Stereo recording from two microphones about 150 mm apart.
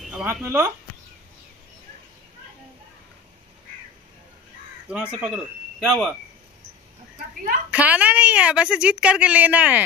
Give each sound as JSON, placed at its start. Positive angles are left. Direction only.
{"t": 0.0, "sound": "speech", "side_deg": -5}
{"t": 4.8, "sound": "speech", "side_deg": -5}
{"t": 7.7, "sound": "a woman's voice", "side_deg": -10}